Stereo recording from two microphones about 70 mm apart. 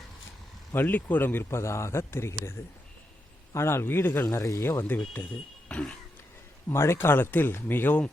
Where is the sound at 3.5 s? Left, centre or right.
Left.